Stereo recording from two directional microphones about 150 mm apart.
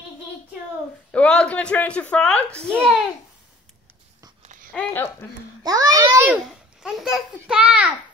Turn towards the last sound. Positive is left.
turn(degrees=-10)  # may be behind; listen again after turning